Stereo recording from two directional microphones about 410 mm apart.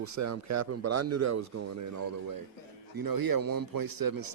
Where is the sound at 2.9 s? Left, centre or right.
Right.